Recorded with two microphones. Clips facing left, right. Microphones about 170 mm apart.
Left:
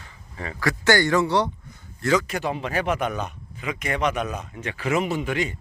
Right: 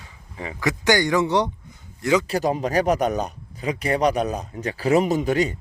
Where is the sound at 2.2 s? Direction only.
35° right (ahead or behind).